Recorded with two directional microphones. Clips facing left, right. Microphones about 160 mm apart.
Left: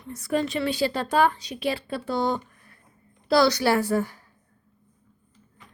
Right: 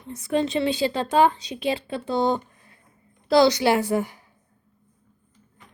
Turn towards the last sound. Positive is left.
turn(degrees=-15)  # may be behind; listen again after turning